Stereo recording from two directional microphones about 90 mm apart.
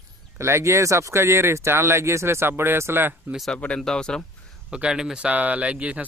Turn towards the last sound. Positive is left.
turn(degrees=-15)  # may be behind; listen again after turning